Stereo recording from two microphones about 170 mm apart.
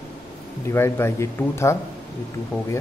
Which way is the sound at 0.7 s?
15° left (ahead or behind).